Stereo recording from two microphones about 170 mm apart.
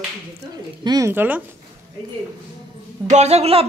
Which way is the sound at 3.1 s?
40° right (ahead or behind).